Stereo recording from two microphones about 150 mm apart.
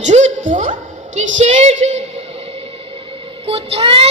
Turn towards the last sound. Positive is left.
turn(degrees=-40)  # may be behind; listen again after turning